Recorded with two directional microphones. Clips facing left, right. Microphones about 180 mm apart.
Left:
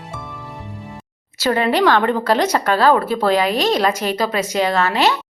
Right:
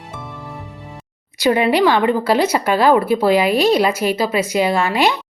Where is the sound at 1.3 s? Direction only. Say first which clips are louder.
Right 2 dB; 15° right (ahead or behind).